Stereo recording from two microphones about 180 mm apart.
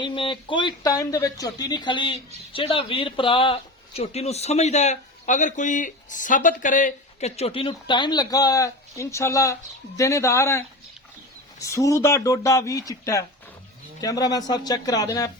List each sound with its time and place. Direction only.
0.0 s speech: 25° left (ahead or behind)
11.6 s speech: 15° left (ahead or behind)